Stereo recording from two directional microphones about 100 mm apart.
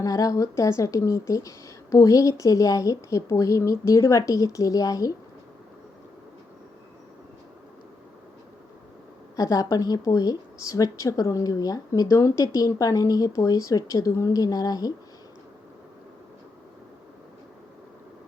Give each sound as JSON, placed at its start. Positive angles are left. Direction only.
{"t": 0.0, "sound": "a woman's voice", "side_deg": 35}
{"t": 9.3, "sound": "a woman's voice", "side_deg": 35}